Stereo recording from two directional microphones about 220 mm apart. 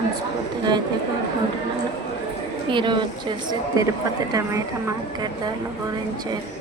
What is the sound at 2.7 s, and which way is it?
A woman's voice, 20° right (ahead or behind).